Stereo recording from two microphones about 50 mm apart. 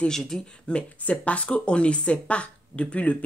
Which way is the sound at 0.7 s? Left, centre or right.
Left.